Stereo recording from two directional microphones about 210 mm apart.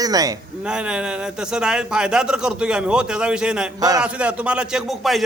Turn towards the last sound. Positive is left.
turn(degrees=0)  # may be behind; listen again after turning